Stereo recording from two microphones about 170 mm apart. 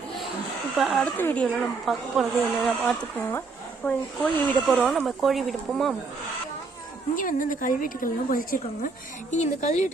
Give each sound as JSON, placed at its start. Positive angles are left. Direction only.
{"t": 0.8, "sound": "speech", "side_deg": 0}
{"t": 1.0, "sound": "speech", "side_deg": 10}
{"t": 1.8, "sound": "speech", "side_deg": 0}
{"t": 7.2, "sound": "a woman's voice", "side_deg": 50}
{"t": 9.3, "sound": "a woman's voice", "side_deg": 45}